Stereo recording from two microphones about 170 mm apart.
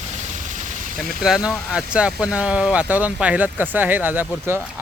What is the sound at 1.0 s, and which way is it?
Speech, centre (ahead or behind).